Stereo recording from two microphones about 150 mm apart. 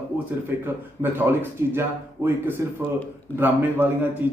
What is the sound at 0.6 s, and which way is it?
A man's voice, 15° right (ahead or behind).